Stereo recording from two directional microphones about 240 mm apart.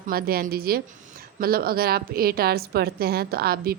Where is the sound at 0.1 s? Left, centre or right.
Right.